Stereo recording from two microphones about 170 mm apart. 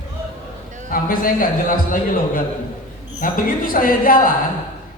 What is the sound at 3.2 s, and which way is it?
A woman's voice, 55° left (ahead or behind).